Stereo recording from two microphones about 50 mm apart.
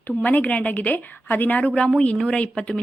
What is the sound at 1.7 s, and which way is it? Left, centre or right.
Speech, centre.